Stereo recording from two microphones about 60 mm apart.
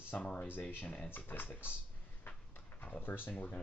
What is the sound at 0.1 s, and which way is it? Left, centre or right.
Speech, left.